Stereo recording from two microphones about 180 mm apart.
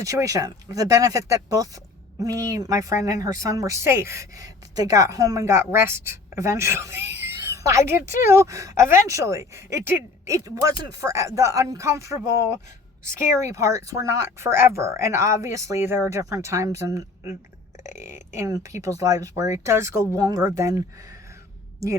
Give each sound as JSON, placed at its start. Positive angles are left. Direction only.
{"t": 0.0, "sound": "a woman's voice", "side_deg": -15}
{"t": 17.8, "sound": "speech", "side_deg": 40}
{"t": 18.3, "sound": "a woman's voice", "side_deg": -20}